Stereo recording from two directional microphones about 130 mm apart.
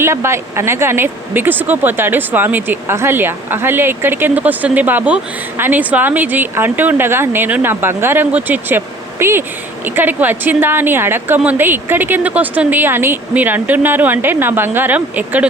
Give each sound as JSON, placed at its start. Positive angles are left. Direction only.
{"t": 0.0, "sound": "speech", "side_deg": -20}